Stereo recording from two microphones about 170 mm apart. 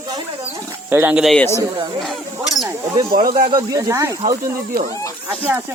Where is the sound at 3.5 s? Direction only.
20° right (ahead or behind).